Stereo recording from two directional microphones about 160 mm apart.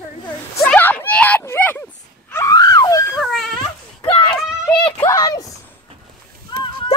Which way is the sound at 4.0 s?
30° left (ahead or behind).